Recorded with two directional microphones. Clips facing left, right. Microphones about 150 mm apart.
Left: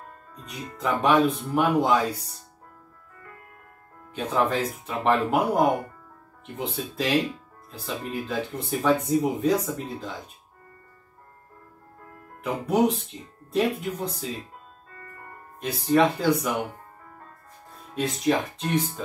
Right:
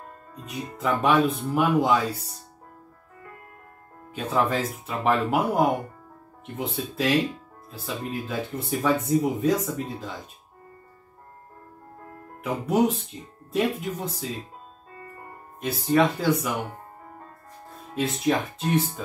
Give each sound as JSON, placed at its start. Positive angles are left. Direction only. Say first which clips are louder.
{"t": 0.5, "sound": "speech", "louder": "right 1 dB", "side_deg": -5}
{"t": 4.1, "sound": "speech", "louder": "even", "side_deg": -5}
{"t": 12.6, "sound": "speech", "louder": "even", "side_deg": 0}
{"t": 15.0, "sound": "music", "louder": "right 3 dB", "side_deg": -20}
{"t": 15.6, "sound": "speech", "louder": "left 1 dB", "side_deg": 0}
{"t": 17.9, "sound": "speech", "louder": "even", "side_deg": 0}